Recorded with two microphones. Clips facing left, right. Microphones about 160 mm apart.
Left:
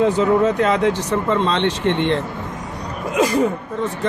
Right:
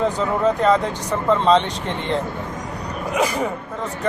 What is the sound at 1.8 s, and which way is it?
Speech, 75° left (ahead or behind).